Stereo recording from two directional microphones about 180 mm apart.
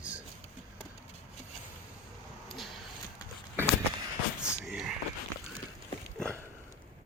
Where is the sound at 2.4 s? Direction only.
Centre (ahead or behind).